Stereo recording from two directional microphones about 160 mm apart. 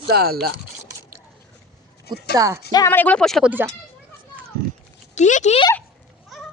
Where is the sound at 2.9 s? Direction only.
10° left (ahead or behind).